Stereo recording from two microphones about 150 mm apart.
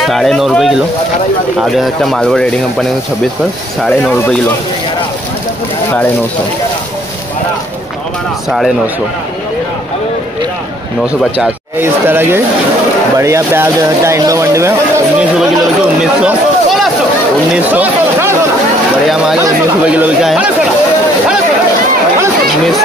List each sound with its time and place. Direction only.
0.0 s speech: centre (ahead or behind)
8.5 s speech: centre (ahead or behind)
11.3 s speech: 10° right (ahead or behind)
19.9 s speech: 10° right (ahead or behind)